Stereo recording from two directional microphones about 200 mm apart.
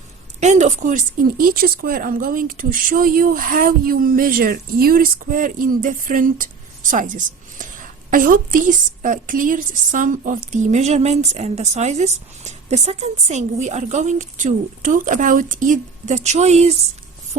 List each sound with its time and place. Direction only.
0.3 s speech: 35° right (ahead or behind)